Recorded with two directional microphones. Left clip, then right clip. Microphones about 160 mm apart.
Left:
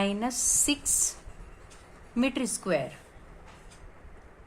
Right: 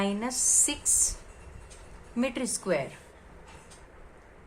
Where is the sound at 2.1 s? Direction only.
30° left (ahead or behind).